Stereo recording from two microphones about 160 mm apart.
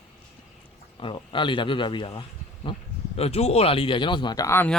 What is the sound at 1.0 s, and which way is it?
Speech, 30° left (ahead or behind).